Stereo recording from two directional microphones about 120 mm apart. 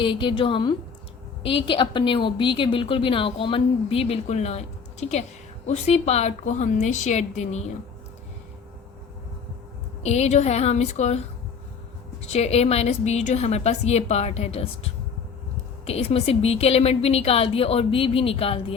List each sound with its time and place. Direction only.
0.0 s a woman's voice: 45° left (ahead or behind); by 7.6 s 70° left (ahead or behind)
10.0 s a woman's voice: 65° left (ahead or behind)
12.3 s a woman's voice: 60° left (ahead or behind)